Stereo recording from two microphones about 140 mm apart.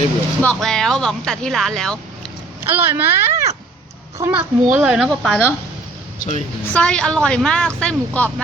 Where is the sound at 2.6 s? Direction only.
15° right (ahead or behind).